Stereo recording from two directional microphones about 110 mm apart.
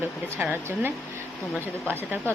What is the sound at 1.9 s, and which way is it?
Speech, 20° right (ahead or behind).